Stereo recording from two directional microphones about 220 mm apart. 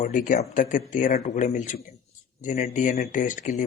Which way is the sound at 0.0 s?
35° left (ahead or behind).